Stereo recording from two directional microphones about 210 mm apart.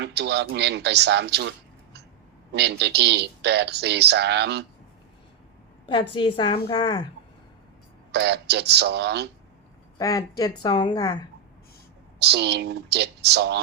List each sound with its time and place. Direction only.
0.0 s a man's voice: 55° right (ahead or behind)
5.8 s a woman's voice: 25° left (ahead or behind)
8.1 s speech: 55° right (ahead or behind)
10.0 s a woman's voice: 15° left (ahead or behind)
12.2 s speech: 50° right (ahead or behind)